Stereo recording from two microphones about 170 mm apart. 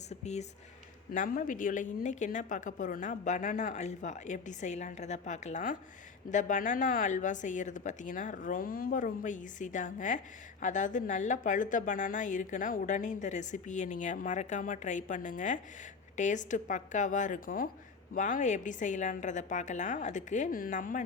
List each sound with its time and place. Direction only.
0.1 s a woman's voice: 40° left (ahead or behind)